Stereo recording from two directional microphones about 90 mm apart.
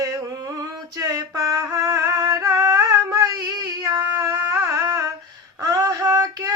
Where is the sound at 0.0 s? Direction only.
40° right (ahead or behind).